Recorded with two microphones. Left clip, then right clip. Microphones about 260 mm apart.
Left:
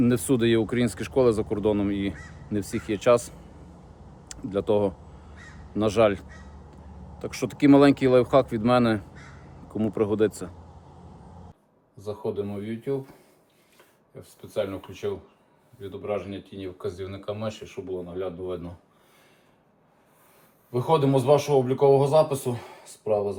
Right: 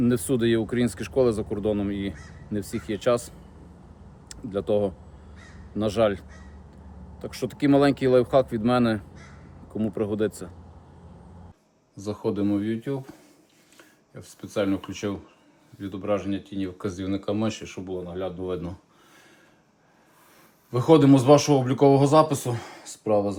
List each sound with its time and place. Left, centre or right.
0.0 s speech: centre
11.9 s speech: right
14.2 s speech: right
20.7 s speech: right